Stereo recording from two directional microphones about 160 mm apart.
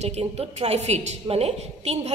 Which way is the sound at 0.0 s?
40° right (ahead or behind).